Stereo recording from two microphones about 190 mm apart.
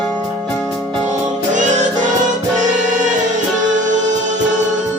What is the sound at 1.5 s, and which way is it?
Music, 40° right (ahead or behind).